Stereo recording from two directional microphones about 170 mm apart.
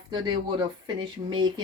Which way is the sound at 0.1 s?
25° right (ahead or behind).